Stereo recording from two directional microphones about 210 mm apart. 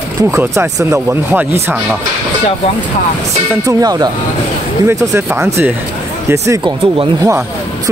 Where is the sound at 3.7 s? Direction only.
15° right (ahead or behind).